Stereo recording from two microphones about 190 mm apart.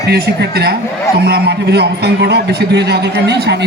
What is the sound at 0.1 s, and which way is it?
A man's voice, 60° right (ahead or behind).